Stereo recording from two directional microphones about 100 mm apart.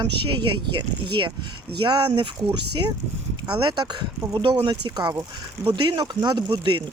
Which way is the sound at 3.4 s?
50° right (ahead or behind).